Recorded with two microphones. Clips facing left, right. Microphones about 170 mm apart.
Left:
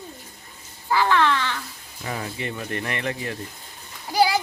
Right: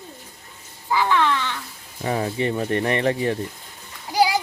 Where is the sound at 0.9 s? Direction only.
15° right (ahead or behind).